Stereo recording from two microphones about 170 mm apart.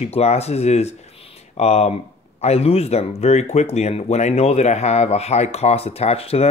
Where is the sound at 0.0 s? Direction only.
40° left (ahead or behind).